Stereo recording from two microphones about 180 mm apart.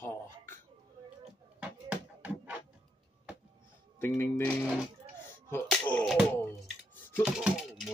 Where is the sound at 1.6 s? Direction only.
10° right (ahead or behind).